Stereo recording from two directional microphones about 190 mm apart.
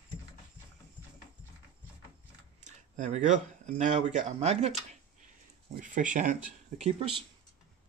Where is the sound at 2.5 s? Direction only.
40° right (ahead or behind).